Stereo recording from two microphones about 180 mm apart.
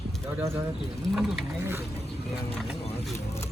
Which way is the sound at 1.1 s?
Centre (ahead or behind).